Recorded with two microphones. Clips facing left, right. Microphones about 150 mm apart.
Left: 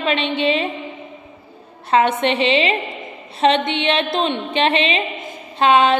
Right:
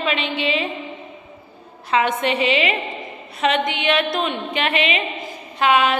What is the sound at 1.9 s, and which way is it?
A woman's voice, 25° left (ahead or behind).